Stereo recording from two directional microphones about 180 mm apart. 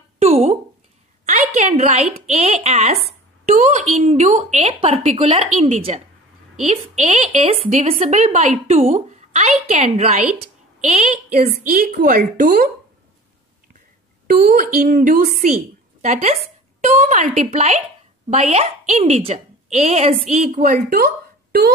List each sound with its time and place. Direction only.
0.2 s a sound: 35° right (ahead or behind)
2.1 s a woman's voice: 35° right (ahead or behind)
14.2 s a woman's voice: 55° right (ahead or behind)
16.0 s a woman's voice: 40° right (ahead or behind)
20.6 s speech: 55° right (ahead or behind)